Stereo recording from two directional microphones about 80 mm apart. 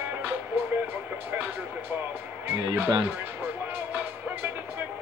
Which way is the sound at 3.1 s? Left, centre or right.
Right.